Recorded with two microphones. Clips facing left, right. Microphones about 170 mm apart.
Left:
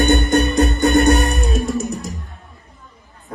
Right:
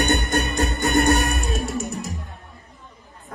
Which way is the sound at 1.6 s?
20° left (ahead or behind).